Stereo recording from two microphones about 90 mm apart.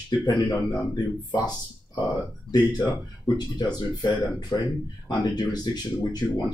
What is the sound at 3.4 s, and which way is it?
Speech, 50° left (ahead or behind).